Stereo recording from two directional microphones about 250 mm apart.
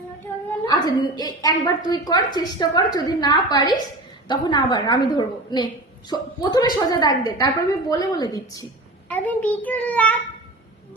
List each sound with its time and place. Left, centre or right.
0.7 s a woman's voice: centre